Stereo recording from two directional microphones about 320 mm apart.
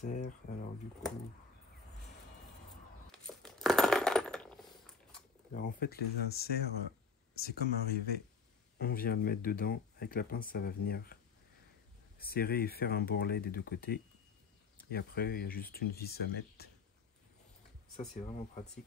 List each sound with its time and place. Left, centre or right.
0.0 s speech: left
3.1 s coin: centre
5.5 s speech: left
12.2 s speech: left
18.1 s speech: left